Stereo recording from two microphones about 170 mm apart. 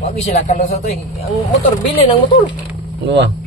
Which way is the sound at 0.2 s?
40° left (ahead or behind).